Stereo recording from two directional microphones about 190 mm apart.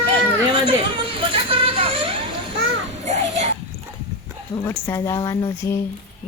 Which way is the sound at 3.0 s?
35° right (ahead or behind).